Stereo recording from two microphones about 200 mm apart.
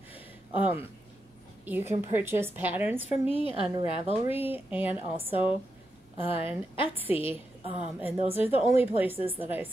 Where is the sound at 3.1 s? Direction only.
30° left (ahead or behind).